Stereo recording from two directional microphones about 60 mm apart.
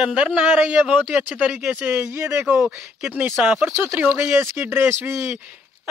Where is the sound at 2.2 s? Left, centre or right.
Right.